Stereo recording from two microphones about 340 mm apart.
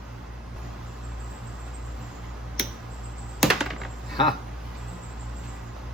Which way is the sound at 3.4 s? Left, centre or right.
Centre.